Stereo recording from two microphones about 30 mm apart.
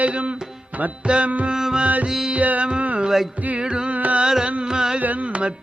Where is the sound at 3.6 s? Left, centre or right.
Right.